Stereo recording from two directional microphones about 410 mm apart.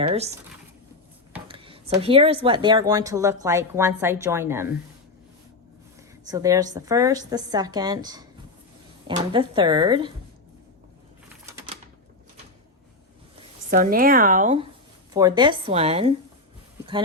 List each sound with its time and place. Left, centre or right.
0.0 s speech: centre
1.3 s a sound: centre
2.0 s speech: centre
6.2 s speech: centre
13.7 s speech: centre